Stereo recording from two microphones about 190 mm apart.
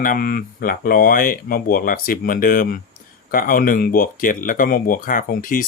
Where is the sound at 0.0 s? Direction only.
50° left (ahead or behind).